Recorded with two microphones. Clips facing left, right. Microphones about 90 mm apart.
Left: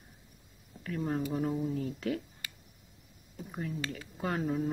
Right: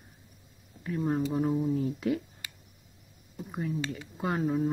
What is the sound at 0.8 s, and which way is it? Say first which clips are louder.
Speech: right 4 dB; 15° right (ahead or behind).